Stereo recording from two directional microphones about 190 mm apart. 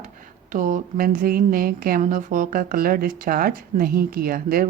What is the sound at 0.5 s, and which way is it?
Speech, 40° right (ahead or behind).